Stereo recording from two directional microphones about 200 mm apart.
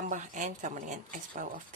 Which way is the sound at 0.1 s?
40° right (ahead or behind).